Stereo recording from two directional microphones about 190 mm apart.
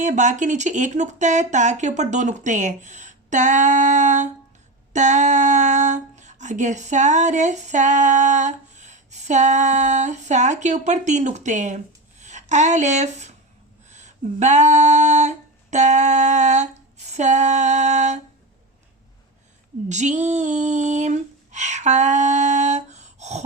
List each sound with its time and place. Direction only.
0.0 s speech: 40° right (ahead or behind)
13.9 s a sound: 40° right (ahead or behind)
17.1 s speech: 40° right (ahead or behind)
19.9 s female singing: 40° right (ahead or behind)